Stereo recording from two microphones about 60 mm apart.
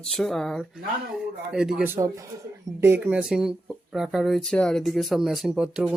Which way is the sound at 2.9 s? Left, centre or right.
Right.